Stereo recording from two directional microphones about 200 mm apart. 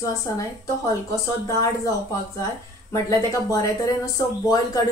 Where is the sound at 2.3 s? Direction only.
15° left (ahead or behind).